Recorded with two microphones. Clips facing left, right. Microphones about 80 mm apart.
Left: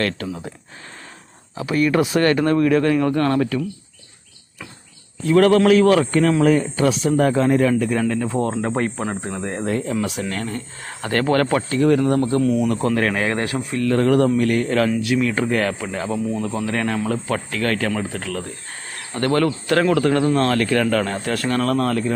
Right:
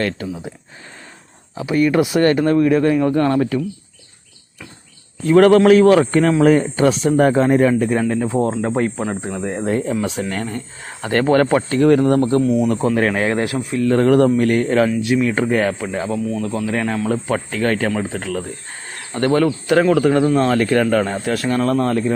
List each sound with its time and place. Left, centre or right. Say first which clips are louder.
1.5 s speech: right 2 dB; right
5.3 s a man's voice: right 4 dB; right
8.0 s speech: right 3 dB; centre
9.6 s a man's voice: right 3 dB; right
11.7 s a man's voice: right 3 dB; right
12.4 s speech: right 2 dB; centre
13.8 s a man's voice: right 3 dB; right
15.0 s speech: right 3 dB; centre
16.0 s speech: left 1 dB; centre
16.6 s speech: right 2 dB; centre
17.1 s speech: right 3 dB; centre
19.4 s speech: right 2 dB; centre